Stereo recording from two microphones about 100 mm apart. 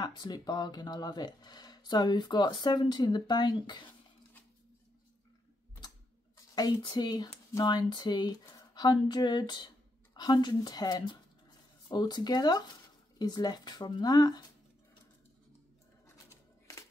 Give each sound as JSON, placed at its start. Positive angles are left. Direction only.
{"t": 0.0, "sound": "speech", "side_deg": 40}
{"t": 6.3, "sound": "speech", "side_deg": 40}
{"t": 16.3, "sound": "typewriter", "side_deg": 30}